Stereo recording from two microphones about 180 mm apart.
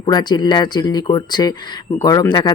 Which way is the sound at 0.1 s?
25° left (ahead or behind).